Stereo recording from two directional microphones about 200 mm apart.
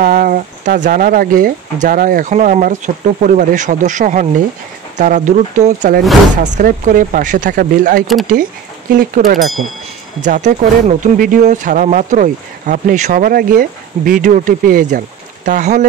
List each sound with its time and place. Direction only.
0.0 s speech: 45° right (ahead or behind)